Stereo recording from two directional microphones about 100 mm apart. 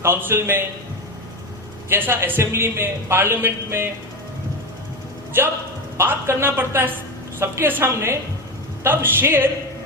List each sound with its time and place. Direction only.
0.0 s a man's voice: 25° right (ahead or behind)
1.9 s a man's voice: 20° right (ahead or behind)
5.3 s a man's voice: 20° right (ahead or behind)